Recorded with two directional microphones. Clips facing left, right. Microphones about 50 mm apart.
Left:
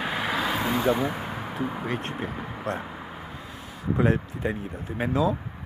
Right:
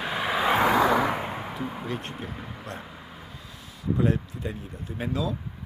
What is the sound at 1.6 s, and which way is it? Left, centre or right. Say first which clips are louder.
Speech: left 3 dB; centre.